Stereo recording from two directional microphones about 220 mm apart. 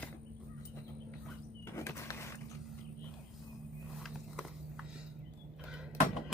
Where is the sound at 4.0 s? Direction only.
Centre (ahead or behind).